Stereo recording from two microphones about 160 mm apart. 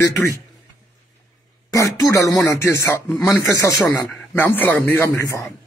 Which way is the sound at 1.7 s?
20° left (ahead or behind).